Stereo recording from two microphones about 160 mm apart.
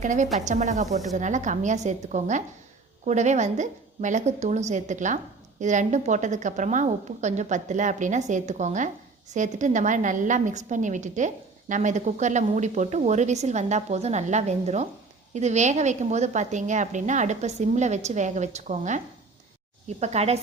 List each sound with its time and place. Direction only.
0.0 s a woman's voice: 50° right (ahead or behind)